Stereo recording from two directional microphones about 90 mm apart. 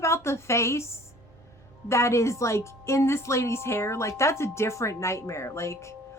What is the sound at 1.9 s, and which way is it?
A woman's voice, 30° left (ahead or behind).